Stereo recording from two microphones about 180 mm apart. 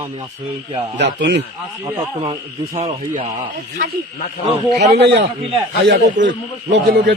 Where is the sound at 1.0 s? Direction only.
70° right (ahead or behind).